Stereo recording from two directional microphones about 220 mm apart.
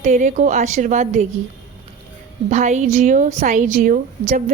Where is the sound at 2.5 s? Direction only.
35° right (ahead or behind).